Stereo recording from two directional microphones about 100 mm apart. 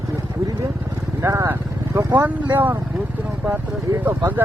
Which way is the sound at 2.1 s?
20° right (ahead or behind).